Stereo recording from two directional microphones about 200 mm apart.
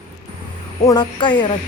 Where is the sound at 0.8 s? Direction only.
20° left (ahead or behind).